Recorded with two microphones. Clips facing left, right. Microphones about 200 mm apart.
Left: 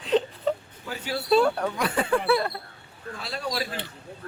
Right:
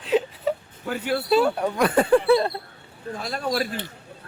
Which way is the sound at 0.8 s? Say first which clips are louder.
Right 6 dB; 55° right (ahead or behind).